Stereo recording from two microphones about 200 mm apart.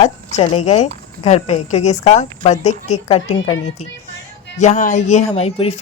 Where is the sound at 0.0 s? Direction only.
30° left (ahead or behind).